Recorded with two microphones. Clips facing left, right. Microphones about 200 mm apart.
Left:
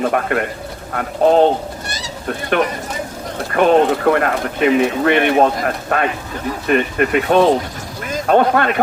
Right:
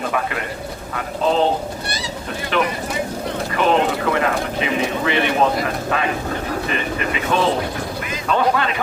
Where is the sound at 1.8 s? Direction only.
45° left (ahead or behind).